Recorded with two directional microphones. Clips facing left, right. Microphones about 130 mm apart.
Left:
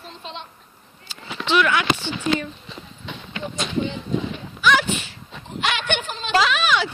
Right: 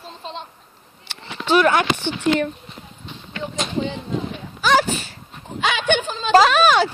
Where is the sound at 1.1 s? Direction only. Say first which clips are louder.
Right 2 dB; 65° right (ahead or behind).